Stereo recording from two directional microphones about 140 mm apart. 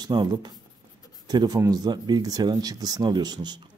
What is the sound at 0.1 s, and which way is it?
A man's voice, 30° right (ahead or behind).